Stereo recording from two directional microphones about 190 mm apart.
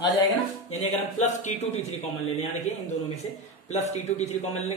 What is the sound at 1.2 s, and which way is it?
A man's voice, 35° left (ahead or behind).